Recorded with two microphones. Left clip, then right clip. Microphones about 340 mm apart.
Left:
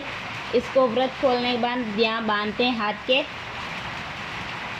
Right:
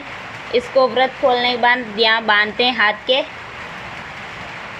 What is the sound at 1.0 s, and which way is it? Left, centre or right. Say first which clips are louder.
A woman's voice: right 7 dB; right.